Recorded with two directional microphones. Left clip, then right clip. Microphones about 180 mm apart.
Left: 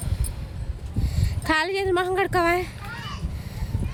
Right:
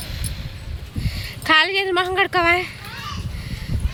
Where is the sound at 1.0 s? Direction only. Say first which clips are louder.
Right 6 dB; 10° left (ahead or behind).